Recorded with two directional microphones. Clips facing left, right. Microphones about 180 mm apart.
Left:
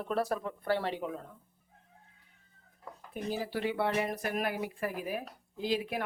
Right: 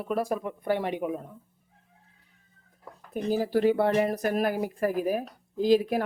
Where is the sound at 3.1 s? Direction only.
40° right (ahead or behind).